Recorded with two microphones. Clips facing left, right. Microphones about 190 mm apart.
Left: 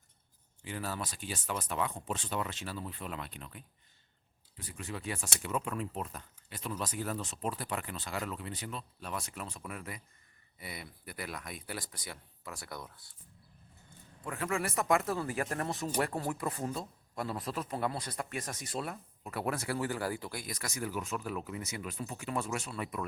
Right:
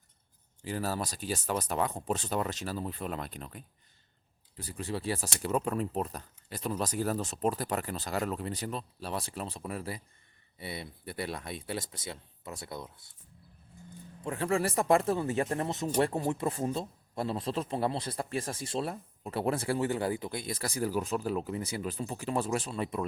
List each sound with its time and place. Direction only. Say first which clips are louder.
0.6 s speech: right 5 dB; 40° right (ahead or behind); by 13.1 s 20° right (ahead or behind)
14.3 s speech: right 5 dB; 30° right (ahead or behind)